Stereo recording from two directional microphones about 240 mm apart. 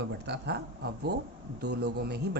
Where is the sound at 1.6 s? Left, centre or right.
Right.